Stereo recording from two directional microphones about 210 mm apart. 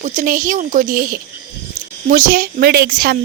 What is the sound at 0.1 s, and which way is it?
A woman's voice, 40° right (ahead or behind).